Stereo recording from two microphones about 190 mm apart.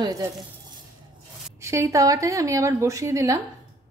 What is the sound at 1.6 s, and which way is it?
Frying, 15° right (ahead or behind).